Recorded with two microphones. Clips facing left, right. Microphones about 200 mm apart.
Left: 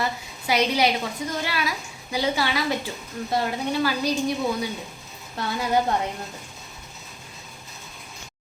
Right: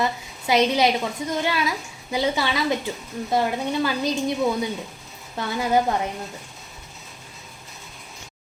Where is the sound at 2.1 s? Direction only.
25° right (ahead or behind).